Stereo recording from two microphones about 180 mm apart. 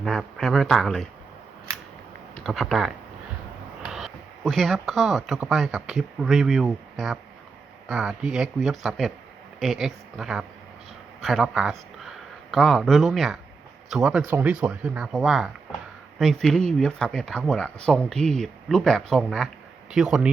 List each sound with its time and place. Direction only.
0.0 s speech: centre (ahead or behind)
2.3 s speech: centre (ahead or behind)
3.9 s speech: centre (ahead or behind)